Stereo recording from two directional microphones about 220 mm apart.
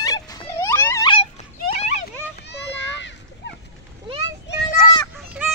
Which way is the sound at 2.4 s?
55° left (ahead or behind).